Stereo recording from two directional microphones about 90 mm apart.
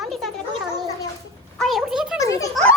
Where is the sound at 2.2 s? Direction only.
40° left (ahead or behind).